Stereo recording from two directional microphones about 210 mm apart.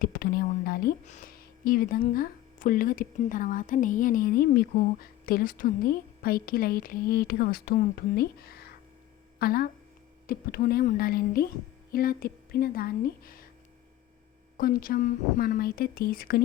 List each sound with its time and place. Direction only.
0.0 s a woman's voice: 45° left (ahead or behind)
14.6 s speech: 40° left (ahead or behind)